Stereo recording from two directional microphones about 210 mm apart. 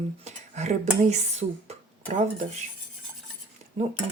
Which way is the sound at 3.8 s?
35° right (ahead or behind).